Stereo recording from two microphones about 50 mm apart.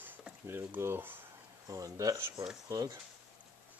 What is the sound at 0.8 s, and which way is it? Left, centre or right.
Speech, right.